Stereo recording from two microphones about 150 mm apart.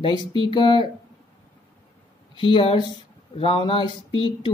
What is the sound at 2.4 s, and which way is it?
Speech, 35° left (ahead or behind).